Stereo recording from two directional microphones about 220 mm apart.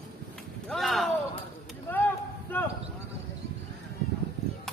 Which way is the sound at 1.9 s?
10° left (ahead or behind).